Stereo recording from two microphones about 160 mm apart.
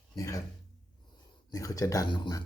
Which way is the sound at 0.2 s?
20° left (ahead or behind).